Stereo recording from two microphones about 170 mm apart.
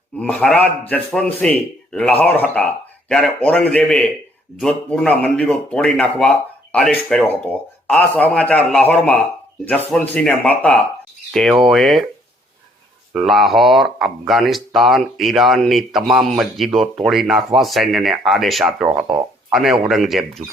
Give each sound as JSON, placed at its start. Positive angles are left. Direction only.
{"t": 0.2, "sound": "a man's voice", "side_deg": 5}
{"t": 13.1, "sound": "speech", "side_deg": 0}